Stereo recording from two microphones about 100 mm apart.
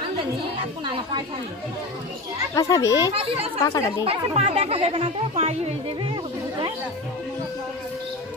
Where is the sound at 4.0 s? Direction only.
70° right (ahead or behind).